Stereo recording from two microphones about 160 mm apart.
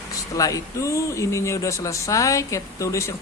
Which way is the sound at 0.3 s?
20° left (ahead or behind).